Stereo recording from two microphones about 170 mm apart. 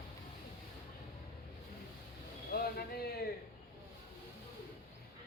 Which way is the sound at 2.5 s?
65° left (ahead or behind).